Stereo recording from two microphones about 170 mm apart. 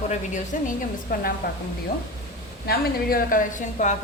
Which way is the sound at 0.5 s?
50° left (ahead or behind).